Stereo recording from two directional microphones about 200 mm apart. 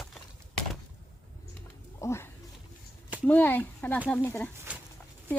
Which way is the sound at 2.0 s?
15° left (ahead or behind).